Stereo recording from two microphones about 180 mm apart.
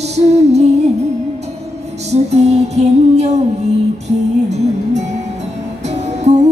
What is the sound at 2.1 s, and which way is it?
Music, 35° right (ahead or behind).